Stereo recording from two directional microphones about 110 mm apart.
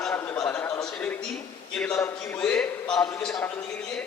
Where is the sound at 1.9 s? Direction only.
25° left (ahead or behind).